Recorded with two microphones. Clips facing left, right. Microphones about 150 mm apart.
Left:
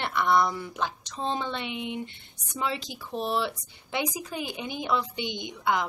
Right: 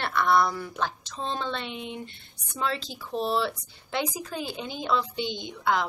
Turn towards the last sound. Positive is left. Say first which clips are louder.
# right 1 dB
turn(degrees=15)  # may be behind; listen again after turning